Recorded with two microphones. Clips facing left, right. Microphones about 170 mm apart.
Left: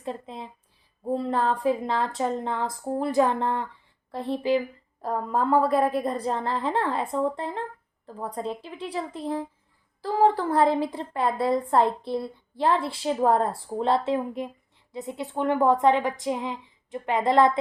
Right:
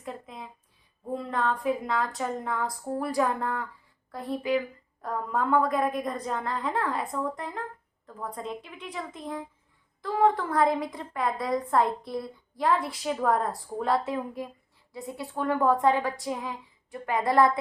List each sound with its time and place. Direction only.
0.0 s a woman's voice: 30° left (ahead or behind)